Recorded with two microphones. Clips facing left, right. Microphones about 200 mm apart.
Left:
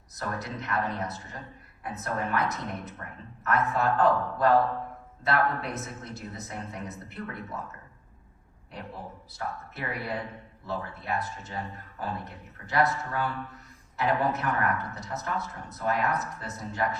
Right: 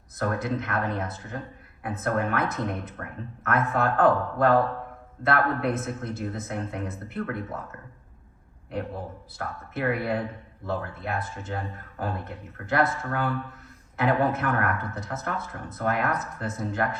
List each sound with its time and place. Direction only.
0.2 s speech: 55° right (ahead or behind)
9.7 s speech: 55° right (ahead or behind)